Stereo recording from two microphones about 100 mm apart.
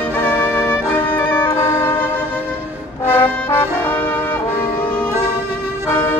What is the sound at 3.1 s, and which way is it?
Brass instrument, 20° left (ahead or behind).